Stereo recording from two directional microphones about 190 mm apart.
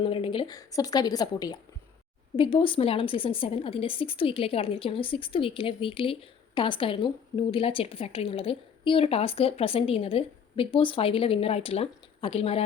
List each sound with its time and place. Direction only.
0.0 s a woman's voice: 25° left (ahead or behind)